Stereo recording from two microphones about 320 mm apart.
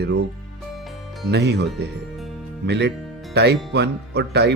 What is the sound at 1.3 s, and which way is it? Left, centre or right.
Speech, right.